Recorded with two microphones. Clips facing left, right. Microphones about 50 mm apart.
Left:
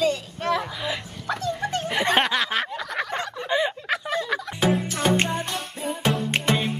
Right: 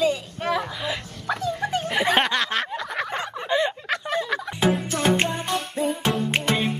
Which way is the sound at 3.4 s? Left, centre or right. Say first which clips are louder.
Right 1 dB; centre.